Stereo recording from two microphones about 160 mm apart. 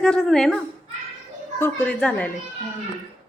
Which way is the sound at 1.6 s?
10° left (ahead or behind).